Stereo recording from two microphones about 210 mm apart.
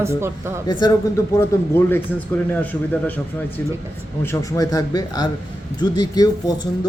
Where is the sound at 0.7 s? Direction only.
20° left (ahead or behind).